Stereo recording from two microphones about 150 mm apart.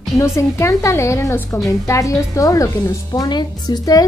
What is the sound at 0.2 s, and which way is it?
Speech, 20° left (ahead or behind).